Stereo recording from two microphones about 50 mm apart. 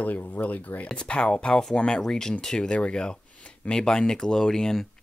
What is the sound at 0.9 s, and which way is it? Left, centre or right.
Speech, centre.